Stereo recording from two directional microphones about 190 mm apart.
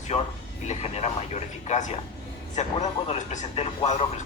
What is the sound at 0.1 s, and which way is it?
Speech, 30° left (ahead or behind).